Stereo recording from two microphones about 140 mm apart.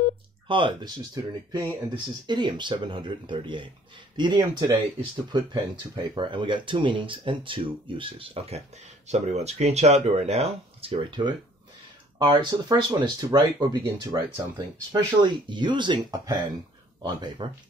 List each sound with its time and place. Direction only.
0.5 s speech: 35° right (ahead or behind)